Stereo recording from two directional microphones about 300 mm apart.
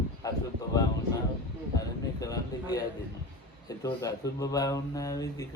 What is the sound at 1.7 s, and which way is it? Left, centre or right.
Speech, centre.